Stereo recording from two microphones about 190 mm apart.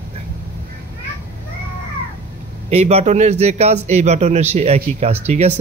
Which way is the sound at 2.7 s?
35° right (ahead or behind).